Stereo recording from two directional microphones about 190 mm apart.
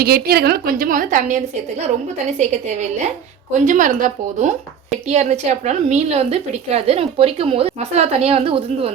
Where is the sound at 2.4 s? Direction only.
35° right (ahead or behind).